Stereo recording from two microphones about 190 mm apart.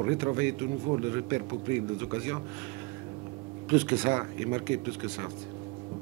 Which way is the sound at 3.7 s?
10° right (ahead or behind).